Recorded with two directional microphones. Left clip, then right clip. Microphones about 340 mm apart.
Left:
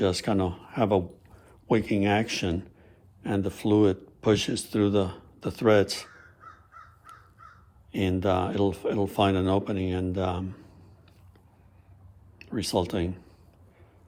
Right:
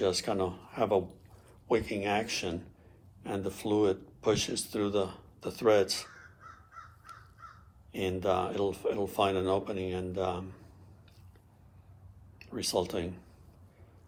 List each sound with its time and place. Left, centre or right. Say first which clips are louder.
0.0 s speech: left 4 dB; left
7.9 s speech: left 4 dB; left
12.4 s speech: left 4 dB; left